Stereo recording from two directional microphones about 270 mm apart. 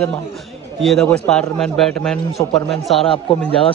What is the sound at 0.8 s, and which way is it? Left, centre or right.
A man's voice, centre.